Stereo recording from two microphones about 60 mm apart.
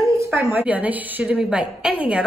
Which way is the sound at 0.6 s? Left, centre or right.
Right.